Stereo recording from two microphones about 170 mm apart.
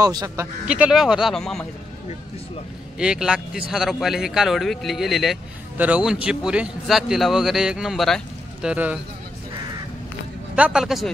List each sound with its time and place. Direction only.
0.0 s speech: 20° right (ahead or behind)
0.7 s a man's voice: 5° right (ahead or behind)
3.0 s a man's voice: 5° right (ahead or behind)
10.5 s a man's voice: 5° right (ahead or behind)